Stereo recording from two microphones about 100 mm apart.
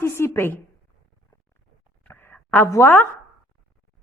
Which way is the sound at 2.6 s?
25° left (ahead or behind).